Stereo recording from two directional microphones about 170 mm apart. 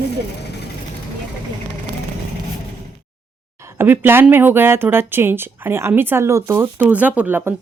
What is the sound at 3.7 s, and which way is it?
Speech, 10° right (ahead or behind).